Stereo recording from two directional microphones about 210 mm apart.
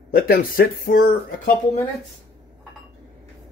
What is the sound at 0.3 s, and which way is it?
Speech, 45° left (ahead or behind).